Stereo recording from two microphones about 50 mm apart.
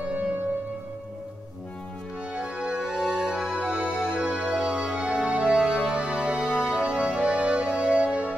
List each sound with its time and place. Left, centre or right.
0.0 s music: right
2.3 s music: centre